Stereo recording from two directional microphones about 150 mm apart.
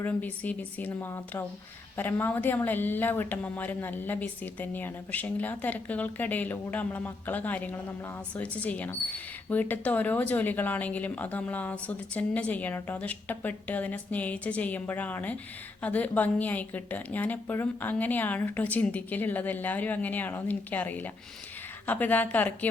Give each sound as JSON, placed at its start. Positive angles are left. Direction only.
{"t": 0.0, "sound": "speech", "side_deg": 10}